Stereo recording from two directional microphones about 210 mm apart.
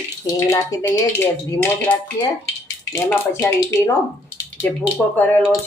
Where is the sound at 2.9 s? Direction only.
15° left (ahead or behind).